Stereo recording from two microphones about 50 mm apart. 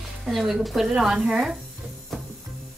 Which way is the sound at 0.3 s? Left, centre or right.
Centre.